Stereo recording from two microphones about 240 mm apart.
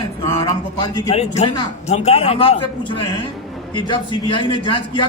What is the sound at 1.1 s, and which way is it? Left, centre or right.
A man's voice, left.